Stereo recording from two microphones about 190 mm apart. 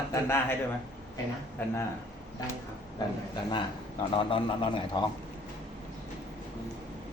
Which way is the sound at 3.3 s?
25° left (ahead or behind).